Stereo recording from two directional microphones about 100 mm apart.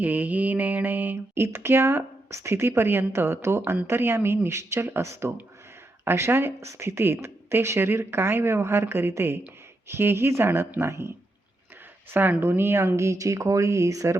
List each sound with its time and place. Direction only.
0.0 s mantra: 15° right (ahead or behind)
1.5 s speech: 25° right (ahead or behind)
12.1 s speech: 20° right (ahead or behind)